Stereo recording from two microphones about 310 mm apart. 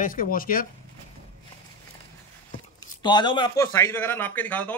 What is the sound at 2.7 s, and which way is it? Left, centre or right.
A man's voice, centre.